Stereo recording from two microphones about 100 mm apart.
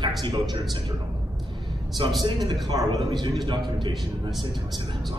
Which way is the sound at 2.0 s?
55° right (ahead or behind).